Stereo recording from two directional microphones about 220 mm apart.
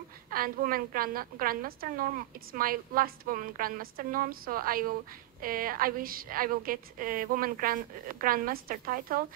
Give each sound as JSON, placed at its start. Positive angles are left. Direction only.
{"t": 0.3, "sound": "a woman's voice", "side_deg": -40}